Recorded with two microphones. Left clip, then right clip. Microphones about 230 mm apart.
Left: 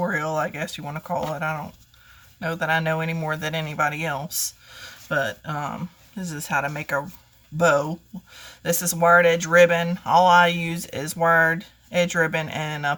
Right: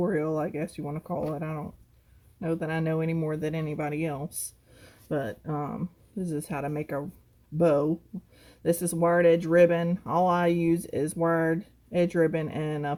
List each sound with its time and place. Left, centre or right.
0.0 s speech: left